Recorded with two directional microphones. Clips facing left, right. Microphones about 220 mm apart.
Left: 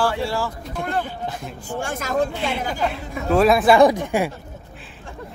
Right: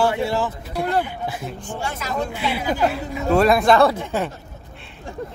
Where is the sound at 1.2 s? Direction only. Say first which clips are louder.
Right 2 dB; 5° right (ahead or behind).